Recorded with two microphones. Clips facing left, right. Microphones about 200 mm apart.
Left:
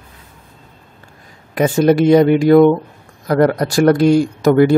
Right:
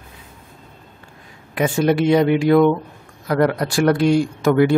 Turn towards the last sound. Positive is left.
turn(degrees=40)  # may be behind; listen again after turning